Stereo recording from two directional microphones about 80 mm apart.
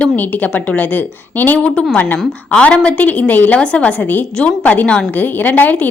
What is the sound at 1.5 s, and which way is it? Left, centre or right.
A woman's voice, centre.